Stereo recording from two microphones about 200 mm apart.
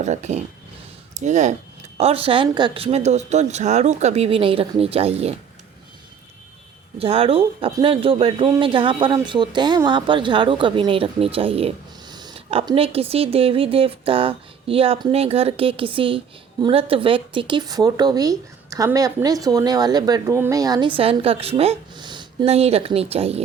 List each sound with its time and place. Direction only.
0.0 s speech: 35° right (ahead or behind)
7.0 s a man's voice: 30° right (ahead or behind)